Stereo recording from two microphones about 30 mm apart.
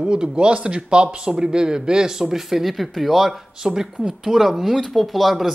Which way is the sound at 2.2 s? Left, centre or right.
Centre.